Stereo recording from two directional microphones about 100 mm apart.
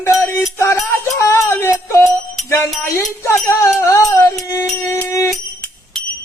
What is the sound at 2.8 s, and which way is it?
Speech, 30° left (ahead or behind).